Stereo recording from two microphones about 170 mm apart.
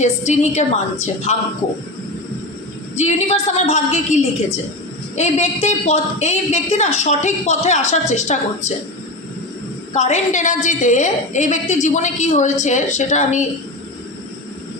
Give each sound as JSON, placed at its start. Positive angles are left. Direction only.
{"t": 0.0, "sound": "a woman's voice", "side_deg": 45}
{"t": 3.0, "sound": "a woman's voice", "side_deg": 40}
{"t": 9.9, "sound": "a woman's voice", "side_deg": 45}